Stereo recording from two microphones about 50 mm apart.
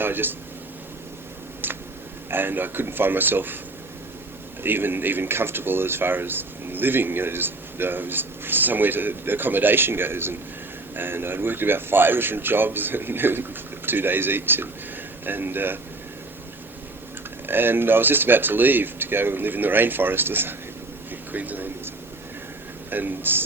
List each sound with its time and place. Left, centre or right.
0.0 s speech: right
1.6 s a sound: right
2.3 s speech: right
4.6 s speech: right
17.4 s speech: right
21.3 s speech: right
22.9 s speech: right